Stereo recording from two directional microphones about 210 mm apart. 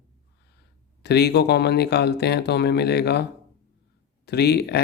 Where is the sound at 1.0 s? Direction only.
50° left (ahead or behind).